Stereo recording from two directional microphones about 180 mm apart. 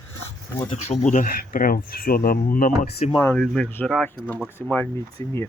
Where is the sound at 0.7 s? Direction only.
40° left (ahead or behind).